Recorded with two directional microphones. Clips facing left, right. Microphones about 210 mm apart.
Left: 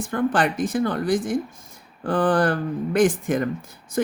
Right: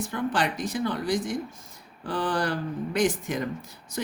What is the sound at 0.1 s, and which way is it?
Speech, 50° left (ahead or behind).